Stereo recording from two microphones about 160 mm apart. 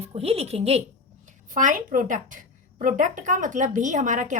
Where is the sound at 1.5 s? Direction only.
55° right (ahead or behind).